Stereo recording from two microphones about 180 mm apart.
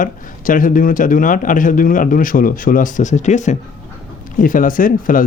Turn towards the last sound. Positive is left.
turn(degrees=50)  # may be behind; listen again after turning